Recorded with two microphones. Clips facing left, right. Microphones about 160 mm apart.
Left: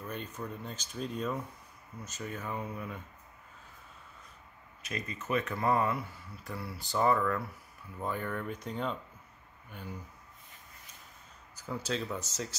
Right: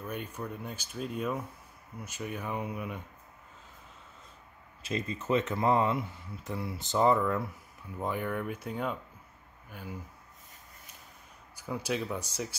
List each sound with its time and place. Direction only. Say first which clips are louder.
0.0 s speech: right 2 dB; 10° right (ahead or behind)
4.8 s speech: right 5 dB; 30° right (ahead or behind); by 9.9 s 5° right (ahead or behind)
11.5 s speech: right 2 dB; 10° right (ahead or behind)